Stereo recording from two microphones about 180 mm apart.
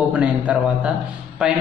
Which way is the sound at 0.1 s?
5° right (ahead or behind).